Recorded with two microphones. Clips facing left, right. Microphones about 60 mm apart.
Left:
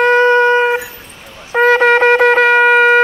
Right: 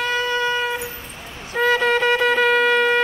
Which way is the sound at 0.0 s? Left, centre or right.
Left.